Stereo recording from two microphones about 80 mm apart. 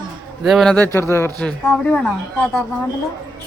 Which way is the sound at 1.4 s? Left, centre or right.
Centre.